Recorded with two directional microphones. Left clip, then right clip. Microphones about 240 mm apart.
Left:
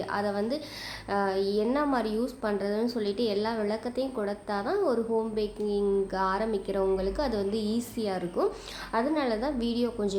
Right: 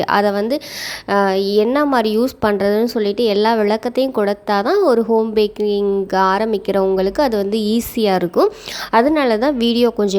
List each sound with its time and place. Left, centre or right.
0.0 s a woman's voice: right